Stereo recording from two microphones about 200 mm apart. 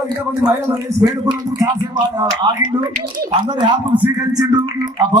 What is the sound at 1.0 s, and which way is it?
Speech, 20° right (ahead or behind).